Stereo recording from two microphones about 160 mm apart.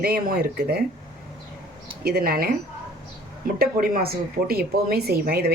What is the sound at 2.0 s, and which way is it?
Speech, 70° right (ahead or behind).